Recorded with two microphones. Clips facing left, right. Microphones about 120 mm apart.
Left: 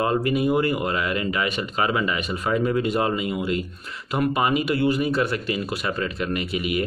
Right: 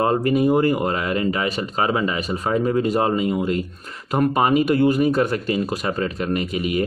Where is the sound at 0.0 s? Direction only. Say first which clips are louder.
Right 3 dB; 40° right (ahead or behind).